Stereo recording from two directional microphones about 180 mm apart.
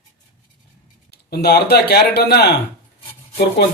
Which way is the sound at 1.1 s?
60° left (ahead or behind).